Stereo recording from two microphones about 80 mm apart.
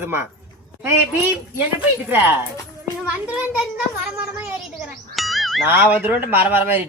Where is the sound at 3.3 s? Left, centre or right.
Centre.